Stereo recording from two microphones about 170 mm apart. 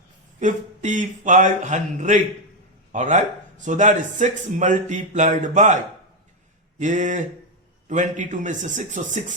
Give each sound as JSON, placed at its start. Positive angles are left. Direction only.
{"t": 0.3, "sound": "speech", "side_deg": -45}